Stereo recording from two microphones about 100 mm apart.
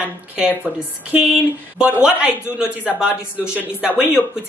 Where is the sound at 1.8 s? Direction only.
10° right (ahead or behind).